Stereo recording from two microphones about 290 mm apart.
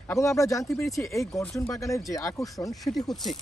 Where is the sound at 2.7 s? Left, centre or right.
Centre.